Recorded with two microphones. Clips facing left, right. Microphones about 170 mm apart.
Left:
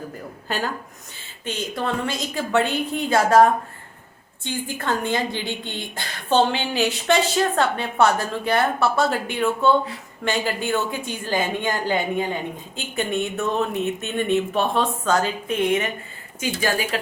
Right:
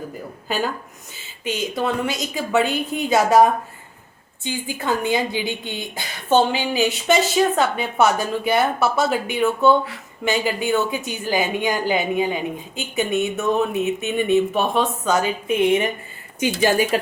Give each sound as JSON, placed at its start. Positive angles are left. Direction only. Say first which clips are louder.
{"t": 0.4, "sound": "a woman's voice", "louder": "right 3 dB", "side_deg": -5}